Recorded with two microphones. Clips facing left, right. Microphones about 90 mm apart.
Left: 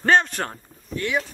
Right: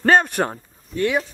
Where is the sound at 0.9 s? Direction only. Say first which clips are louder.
Right 4 dB; 35° right (ahead or behind).